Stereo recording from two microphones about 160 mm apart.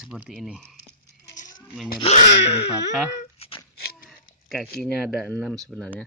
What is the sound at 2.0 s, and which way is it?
Speech, 45° left (ahead or behind).